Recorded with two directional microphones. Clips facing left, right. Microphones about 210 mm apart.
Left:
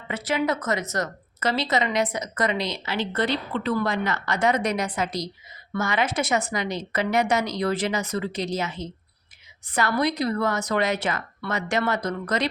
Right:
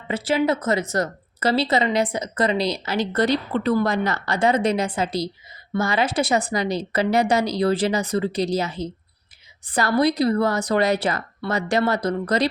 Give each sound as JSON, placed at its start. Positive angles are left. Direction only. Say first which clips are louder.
{"t": 0.1, "sound": "speech", "louder": "right 4 dB", "side_deg": -30}